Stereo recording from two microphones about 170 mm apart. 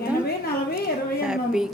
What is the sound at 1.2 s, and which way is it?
Speech, 5° right (ahead or behind).